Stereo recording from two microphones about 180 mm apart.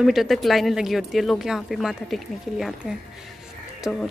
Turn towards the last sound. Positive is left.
turn(degrees=0)  # may be behind; listen again after turning